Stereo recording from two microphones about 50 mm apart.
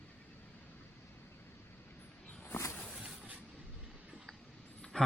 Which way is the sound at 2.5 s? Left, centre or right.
Left.